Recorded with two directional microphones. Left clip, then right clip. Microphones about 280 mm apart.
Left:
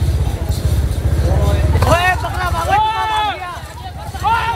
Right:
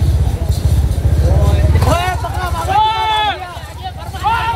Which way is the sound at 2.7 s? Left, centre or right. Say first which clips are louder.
Right 3 dB; left.